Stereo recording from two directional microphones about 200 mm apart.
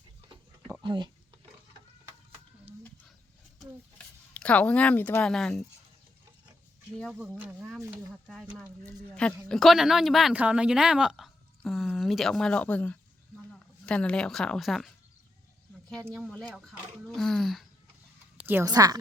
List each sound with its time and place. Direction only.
0.8 s speech: 25° right (ahead or behind)
3.6 s speech: 5° left (ahead or behind)
6.9 s a woman's voice: centre (ahead or behind)
8.8 s a woman's voice: 5° left (ahead or behind)
18.4 s a woman's voice: 15° right (ahead or behind)